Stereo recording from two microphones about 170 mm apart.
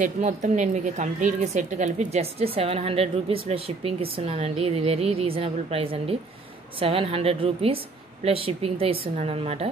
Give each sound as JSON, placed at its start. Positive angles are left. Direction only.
{"t": 0.0, "sound": "a woman's voice", "side_deg": -45}